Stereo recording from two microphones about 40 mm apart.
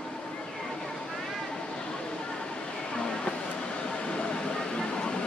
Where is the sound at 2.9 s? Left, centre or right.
Centre.